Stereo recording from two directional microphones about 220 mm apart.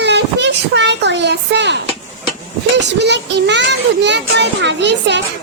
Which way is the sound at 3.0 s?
50° right (ahead or behind).